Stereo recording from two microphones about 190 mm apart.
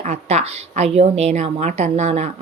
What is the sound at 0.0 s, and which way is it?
A woman's voice, 35° right (ahead or behind).